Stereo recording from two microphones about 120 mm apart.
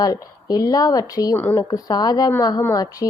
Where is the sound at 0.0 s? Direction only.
30° left (ahead or behind).